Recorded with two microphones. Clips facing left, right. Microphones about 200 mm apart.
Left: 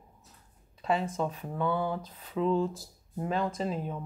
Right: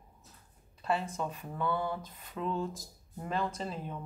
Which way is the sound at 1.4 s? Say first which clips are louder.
Left 2 dB; 10° left (ahead or behind).